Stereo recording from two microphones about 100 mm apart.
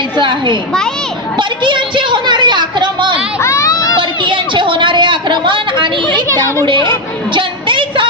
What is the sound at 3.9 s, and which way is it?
Speech, 55° right (ahead or behind).